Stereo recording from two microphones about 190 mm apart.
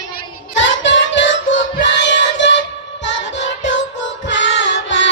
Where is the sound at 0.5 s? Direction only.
75° left (ahead or behind).